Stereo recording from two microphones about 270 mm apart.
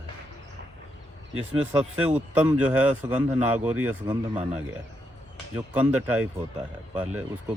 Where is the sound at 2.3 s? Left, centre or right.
Centre.